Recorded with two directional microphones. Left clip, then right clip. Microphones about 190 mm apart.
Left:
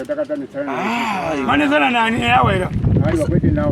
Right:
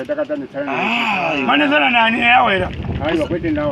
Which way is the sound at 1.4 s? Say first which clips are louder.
Even; 15° right (ahead or behind).